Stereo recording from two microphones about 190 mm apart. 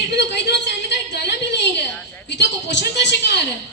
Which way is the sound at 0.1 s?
65° left (ahead or behind).